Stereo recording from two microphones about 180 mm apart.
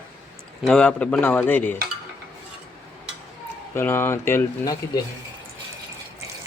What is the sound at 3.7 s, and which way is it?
Speech, 10° left (ahead or behind).